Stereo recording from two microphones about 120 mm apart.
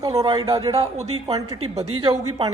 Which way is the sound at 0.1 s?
55° right (ahead or behind).